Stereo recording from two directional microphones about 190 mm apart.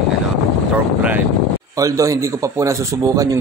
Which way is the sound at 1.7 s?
15° right (ahead or behind).